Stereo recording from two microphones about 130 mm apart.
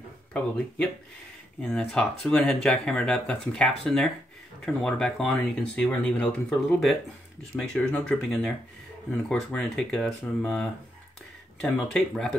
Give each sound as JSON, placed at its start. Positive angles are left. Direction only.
{"t": 0.3, "sound": "speech", "side_deg": 10}